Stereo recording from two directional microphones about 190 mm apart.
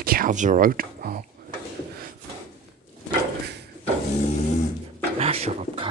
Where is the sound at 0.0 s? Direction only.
50° right (ahead or behind).